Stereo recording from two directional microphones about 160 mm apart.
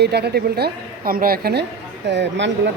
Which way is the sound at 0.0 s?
90° right.